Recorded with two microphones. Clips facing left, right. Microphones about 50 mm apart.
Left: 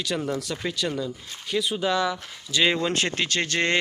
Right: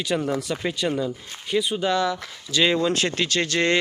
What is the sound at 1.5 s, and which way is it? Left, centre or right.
Speech, centre.